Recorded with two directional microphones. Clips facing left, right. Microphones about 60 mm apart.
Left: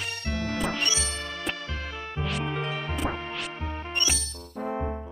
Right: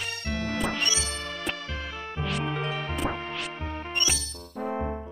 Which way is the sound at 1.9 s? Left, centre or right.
Left.